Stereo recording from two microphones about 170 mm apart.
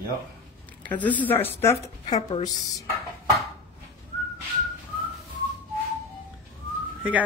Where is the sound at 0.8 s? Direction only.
10° left (ahead or behind).